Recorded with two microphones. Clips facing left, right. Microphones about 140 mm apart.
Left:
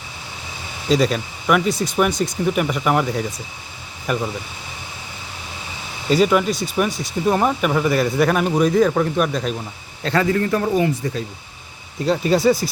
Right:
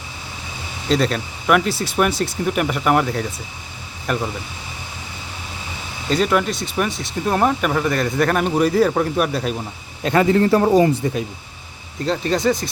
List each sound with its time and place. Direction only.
0.9 s speech: centre (ahead or behind)
6.1 s speech: 5° left (ahead or behind)
10.0 s a man's voice: 20° right (ahead or behind); by 10.9 s 35° right (ahead or behind)
12.0 s speech: 5° left (ahead or behind)